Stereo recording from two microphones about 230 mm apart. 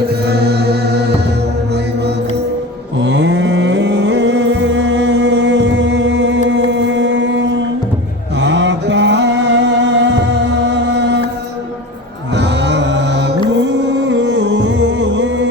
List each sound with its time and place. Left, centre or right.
0.3 s music: right
3.0 s music: right
6.5 s chant: right
12.4 s a sound: right
14.1 s music: right